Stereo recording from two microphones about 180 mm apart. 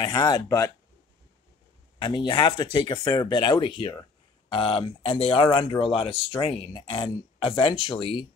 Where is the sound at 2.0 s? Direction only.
25° left (ahead or behind).